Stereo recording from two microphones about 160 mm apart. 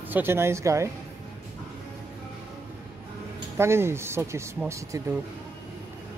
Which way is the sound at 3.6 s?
15° right (ahead or behind).